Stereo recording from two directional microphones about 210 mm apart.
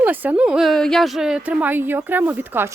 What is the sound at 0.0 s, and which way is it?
A woman's voice, 10° right (ahead or behind).